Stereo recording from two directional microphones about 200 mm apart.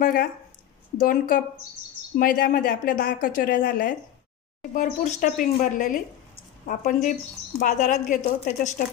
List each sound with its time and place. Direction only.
0.0 s a woman's voice: 45° left (ahead or behind)